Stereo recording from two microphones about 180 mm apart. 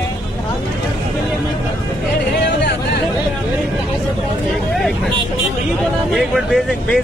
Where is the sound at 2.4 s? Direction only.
70° left (ahead or behind).